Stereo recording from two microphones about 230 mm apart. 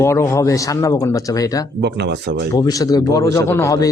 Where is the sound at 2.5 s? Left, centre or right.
Centre.